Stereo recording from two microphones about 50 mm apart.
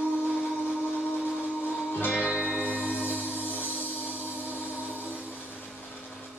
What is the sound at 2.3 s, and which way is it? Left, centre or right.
Music, centre.